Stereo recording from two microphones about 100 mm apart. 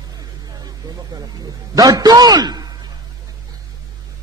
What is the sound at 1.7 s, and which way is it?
Speech, 40° right (ahead or behind).